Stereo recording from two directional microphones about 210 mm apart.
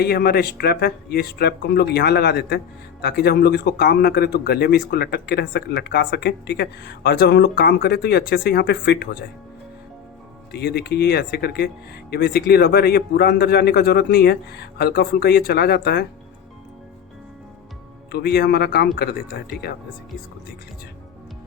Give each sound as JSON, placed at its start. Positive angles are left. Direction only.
{"t": 0.0, "sound": "a man's voice", "side_deg": 50}
{"t": 10.5, "sound": "a man's voice", "side_deg": 50}
{"t": 18.1, "sound": "a man's voice", "side_deg": 50}